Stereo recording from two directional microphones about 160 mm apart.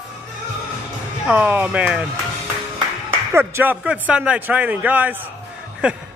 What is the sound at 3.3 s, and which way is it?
A man's voice, 15° right (ahead or behind).